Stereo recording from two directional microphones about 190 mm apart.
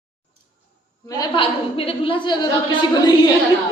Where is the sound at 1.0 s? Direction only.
25° left (ahead or behind).